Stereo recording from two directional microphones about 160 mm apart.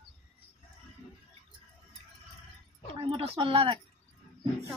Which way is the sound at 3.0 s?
35° right (ahead or behind).